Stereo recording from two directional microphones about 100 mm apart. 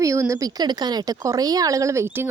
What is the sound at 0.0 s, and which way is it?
Speech, 30° right (ahead or behind).